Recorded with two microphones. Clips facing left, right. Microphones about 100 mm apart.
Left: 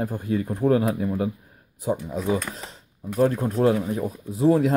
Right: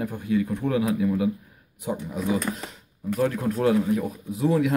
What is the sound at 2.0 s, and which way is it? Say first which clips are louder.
Speech: left 1 dB; 25° left (ahead or behind).